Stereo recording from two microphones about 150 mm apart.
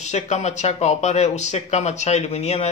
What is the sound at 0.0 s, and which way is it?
A man's voice, 50° left (ahead or behind).